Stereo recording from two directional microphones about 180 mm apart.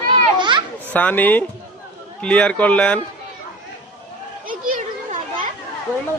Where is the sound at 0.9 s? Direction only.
10° left (ahead or behind).